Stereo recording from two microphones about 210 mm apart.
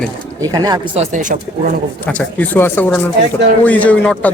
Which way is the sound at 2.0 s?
5° left (ahead or behind).